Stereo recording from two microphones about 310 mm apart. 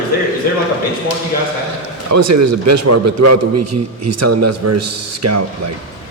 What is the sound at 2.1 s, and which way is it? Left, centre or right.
A man's voice, right.